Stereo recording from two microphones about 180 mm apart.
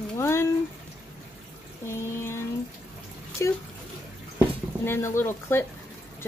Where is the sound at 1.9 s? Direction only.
15° left (ahead or behind).